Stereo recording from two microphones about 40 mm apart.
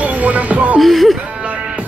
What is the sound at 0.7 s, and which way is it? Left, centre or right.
Music, centre.